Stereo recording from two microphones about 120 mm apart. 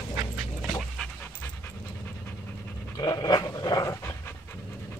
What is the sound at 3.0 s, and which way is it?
Dog, 35° left (ahead or behind).